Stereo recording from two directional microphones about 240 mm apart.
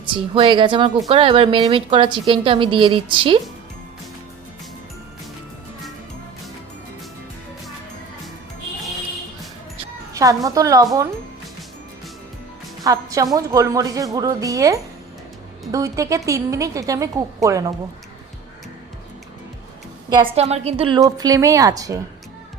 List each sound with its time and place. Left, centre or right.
0.0 s speech: centre
10.2 s a woman's voice: centre
12.8 s a woman's voice: centre
20.1 s a woman's voice: right